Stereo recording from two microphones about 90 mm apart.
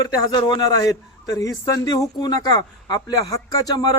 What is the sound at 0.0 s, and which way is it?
Speech, 50° left (ahead or behind).